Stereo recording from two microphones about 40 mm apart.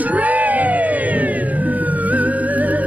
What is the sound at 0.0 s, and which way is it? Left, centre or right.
Music, right.